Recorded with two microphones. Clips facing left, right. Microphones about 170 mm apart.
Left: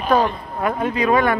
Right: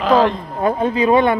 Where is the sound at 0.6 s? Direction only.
30° right (ahead or behind).